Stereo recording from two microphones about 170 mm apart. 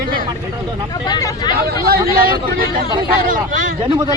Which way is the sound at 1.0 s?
25° left (ahead or behind).